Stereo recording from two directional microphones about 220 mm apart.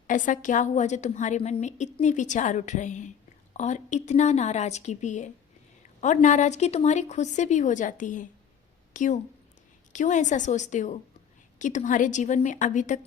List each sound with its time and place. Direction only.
0.1 s a woman's voice: 35° left (ahead or behind)